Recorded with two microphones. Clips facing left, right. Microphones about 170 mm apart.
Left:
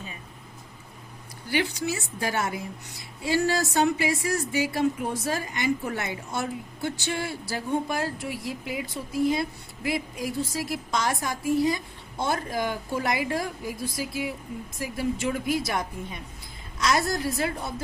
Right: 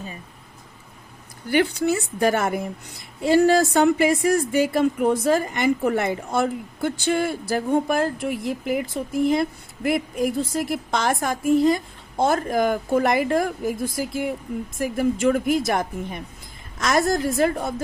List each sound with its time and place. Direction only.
1.5 s speech: 55° right (ahead or behind)
6.8 s speech: 50° right (ahead or behind)